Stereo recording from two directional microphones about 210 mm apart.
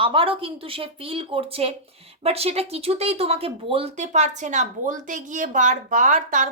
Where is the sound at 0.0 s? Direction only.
25° right (ahead or behind).